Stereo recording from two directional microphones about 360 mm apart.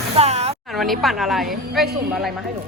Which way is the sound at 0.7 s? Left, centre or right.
Centre.